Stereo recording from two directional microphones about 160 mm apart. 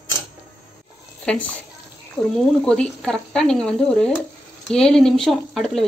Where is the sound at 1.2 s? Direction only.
5° left (ahead or behind).